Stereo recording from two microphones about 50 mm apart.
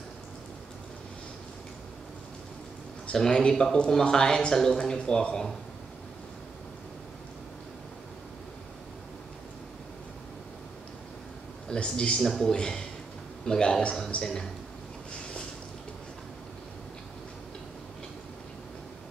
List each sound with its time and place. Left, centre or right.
3.1 s speech: centre
11.7 s speech: left
12.2 s speech: centre